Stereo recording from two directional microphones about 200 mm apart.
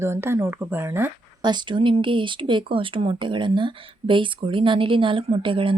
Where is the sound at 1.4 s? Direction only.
25° right (ahead or behind).